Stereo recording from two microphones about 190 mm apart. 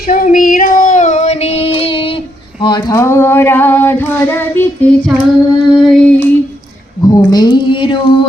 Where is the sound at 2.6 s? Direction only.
20° left (ahead or behind).